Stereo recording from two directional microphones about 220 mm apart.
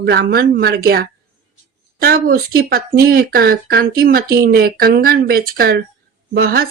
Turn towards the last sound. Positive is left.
turn(degrees=-45)  # may be behind; listen again after turning